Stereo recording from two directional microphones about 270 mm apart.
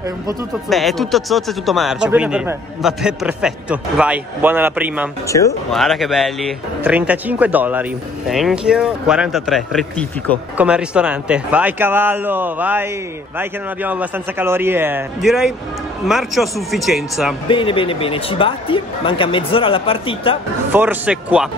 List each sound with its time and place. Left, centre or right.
0.7 s speech: centre
17.5 s speech: centre
20.7 s speech: centre